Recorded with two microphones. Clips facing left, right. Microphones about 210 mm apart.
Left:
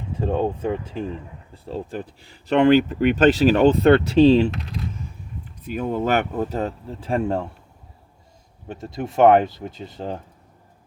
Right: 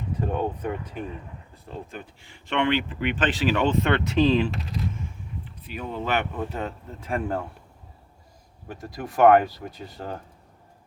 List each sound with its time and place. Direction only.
0.2 s speech: 25° left (ahead or behind)
5.6 s speech: 45° left (ahead or behind); by 7.4 s 25° left (ahead or behind)
8.6 s speech: 25° left (ahead or behind)